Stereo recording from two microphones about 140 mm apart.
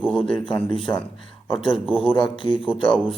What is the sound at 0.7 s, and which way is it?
Speech, 40° left (ahead or behind).